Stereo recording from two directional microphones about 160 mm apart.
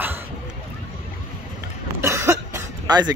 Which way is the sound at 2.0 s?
15° right (ahead or behind).